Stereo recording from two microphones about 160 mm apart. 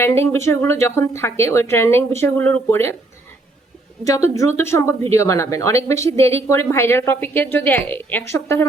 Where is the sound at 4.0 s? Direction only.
20° left (ahead or behind).